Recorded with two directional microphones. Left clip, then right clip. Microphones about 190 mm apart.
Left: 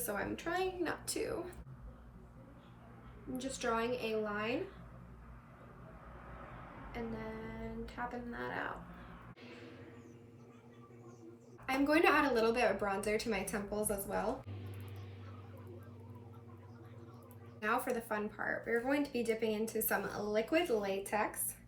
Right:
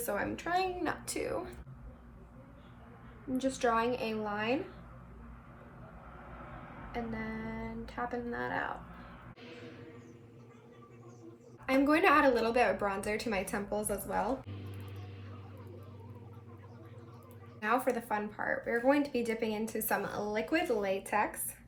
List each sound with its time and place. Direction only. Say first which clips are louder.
0.0 s a woman's voice: right 4 dB; 15° right (ahead or behind)
3.3 s a woman's voice: right 6 dB; 15° right (ahead or behind)
7.5 s speech: right 4 dB; 20° right (ahead or behind)
11.6 s a woman's voice: right 3 dB; 15° right (ahead or behind)
17.6 s a woman's voice: right 4 dB; 15° right (ahead or behind)